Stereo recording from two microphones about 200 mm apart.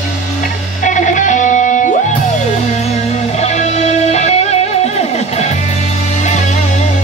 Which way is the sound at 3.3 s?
35° left (ahead or behind).